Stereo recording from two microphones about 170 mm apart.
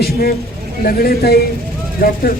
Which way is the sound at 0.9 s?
65° left (ahead or behind).